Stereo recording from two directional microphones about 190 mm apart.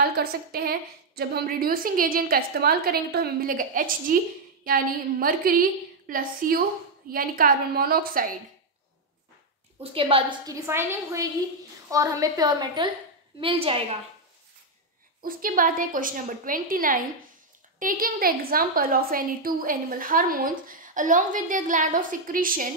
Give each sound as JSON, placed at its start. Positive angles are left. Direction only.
{"t": 0.0, "sound": "a woman's voice", "side_deg": -55}
{"t": 9.9, "sound": "a woman's voice", "side_deg": -30}
{"t": 10.5, "sound": "a woman's voice", "side_deg": -10}
{"t": 15.2, "sound": "a woman's voice", "side_deg": -50}